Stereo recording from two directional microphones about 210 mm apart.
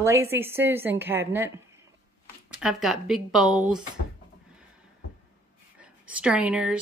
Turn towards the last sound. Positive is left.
turn(degrees=-5)  # may be behind; listen again after turning